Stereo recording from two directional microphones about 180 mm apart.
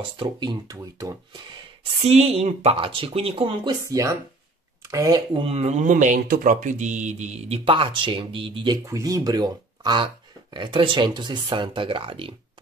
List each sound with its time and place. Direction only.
0.2 s speech: 25° right (ahead or behind)
2.0 s speech: 35° right (ahead or behind)